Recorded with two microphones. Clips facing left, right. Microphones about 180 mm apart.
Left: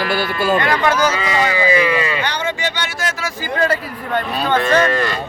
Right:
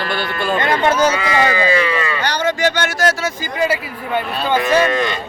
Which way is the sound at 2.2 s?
40° right (ahead or behind).